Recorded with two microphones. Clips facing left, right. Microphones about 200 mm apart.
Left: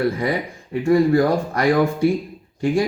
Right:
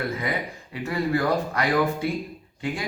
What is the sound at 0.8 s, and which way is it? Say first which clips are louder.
Speech: left 10 dB; 30° left (ahead or behind).